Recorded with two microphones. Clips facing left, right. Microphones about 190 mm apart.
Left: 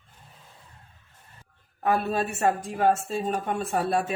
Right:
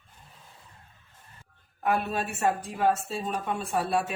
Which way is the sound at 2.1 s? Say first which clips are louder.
Left 3 dB; 45° left (ahead or behind).